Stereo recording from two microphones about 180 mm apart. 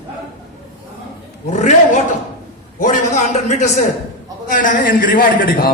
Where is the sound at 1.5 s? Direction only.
40° left (ahead or behind).